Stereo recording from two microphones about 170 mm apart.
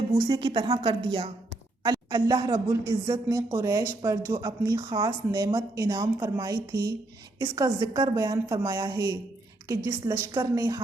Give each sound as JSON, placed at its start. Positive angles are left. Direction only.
{"t": 0.1, "sound": "speech", "side_deg": -30}